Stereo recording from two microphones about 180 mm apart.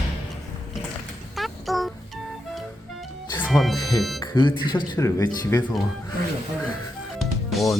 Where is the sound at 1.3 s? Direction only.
Centre (ahead or behind).